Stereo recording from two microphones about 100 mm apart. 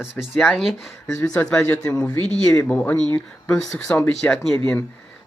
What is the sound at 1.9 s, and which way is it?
Speech, 10° left (ahead or behind).